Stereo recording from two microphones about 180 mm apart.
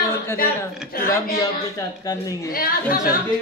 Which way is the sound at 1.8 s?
20° left (ahead or behind).